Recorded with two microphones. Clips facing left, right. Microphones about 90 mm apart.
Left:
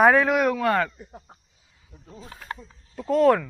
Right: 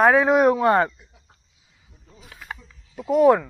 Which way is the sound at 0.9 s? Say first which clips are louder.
Left 11 dB; 45° left (ahead or behind).